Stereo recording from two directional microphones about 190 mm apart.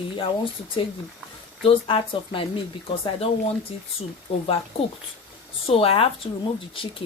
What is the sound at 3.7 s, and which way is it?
Speech, 30° left (ahead or behind).